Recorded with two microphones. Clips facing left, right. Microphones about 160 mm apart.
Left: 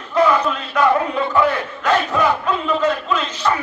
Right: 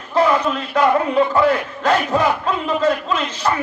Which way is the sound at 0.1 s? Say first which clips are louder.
Even; 30° right (ahead or behind).